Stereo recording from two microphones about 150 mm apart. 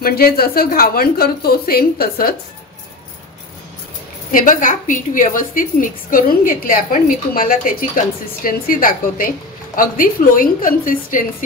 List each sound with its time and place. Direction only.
0.0 s a woman's voice: 90° left
4.3 s a woman's voice: 65° left (ahead or behind)